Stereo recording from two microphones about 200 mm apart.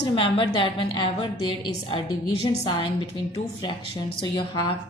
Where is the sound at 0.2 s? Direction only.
25° left (ahead or behind).